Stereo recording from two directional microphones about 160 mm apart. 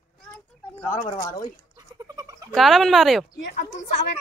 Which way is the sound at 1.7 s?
25° right (ahead or behind).